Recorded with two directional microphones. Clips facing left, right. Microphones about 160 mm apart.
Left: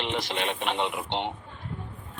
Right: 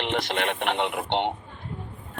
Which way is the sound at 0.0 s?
60° right (ahead or behind).